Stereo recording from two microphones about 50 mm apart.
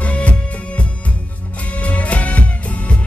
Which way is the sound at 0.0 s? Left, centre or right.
Left.